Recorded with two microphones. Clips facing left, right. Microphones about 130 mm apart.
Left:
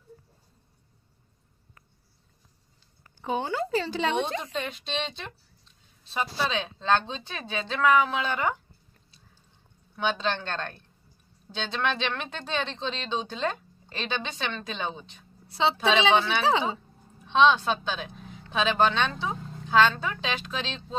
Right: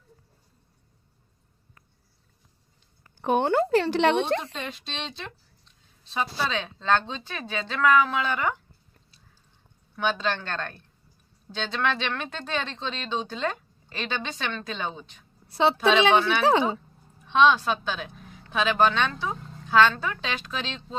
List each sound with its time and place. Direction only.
3.2 s speech: 65° right (ahead or behind)
4.4 s speech: centre (ahead or behind)
6.5 s speech: 20° left (ahead or behind)
9.9 s a woman's voice: 20° left (ahead or behind)